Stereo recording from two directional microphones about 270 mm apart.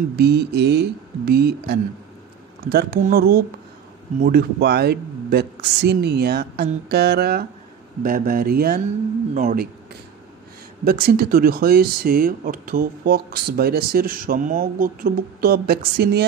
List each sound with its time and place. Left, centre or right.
0.1 s speech: right
10.9 s speech: right